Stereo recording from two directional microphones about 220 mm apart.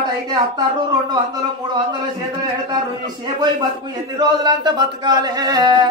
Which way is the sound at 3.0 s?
20° right (ahead or behind).